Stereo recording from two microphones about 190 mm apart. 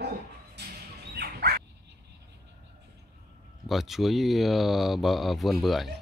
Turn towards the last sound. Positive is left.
turn(degrees=0)  # may be behind; listen again after turning